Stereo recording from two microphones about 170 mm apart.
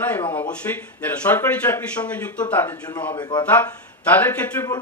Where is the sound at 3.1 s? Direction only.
25° left (ahead or behind).